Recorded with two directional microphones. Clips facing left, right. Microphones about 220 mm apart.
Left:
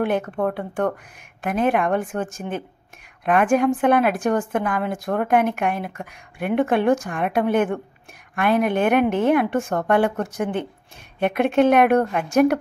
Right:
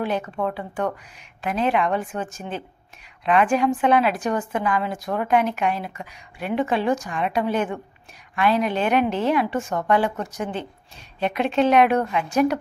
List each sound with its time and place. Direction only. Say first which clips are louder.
0.0 s a woman's voice: left 3 dB; 55° left (ahead or behind)